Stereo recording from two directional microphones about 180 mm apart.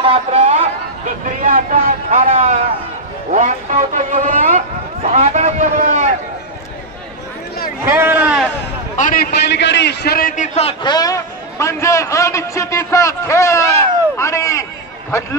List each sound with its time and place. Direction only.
0.0 s a sound: 30° right (ahead or behind)
1.4 s speech: 50° right (ahead or behind)
2.0 s a man's voice: 35° right (ahead or behind)
5.1 s a sound: 40° right (ahead or behind)
7.9 s a man's voice: 15° right (ahead or behind)
8.9 s a man's voice: 50° left (ahead or behind); by 15.2 s 15° left (ahead or behind)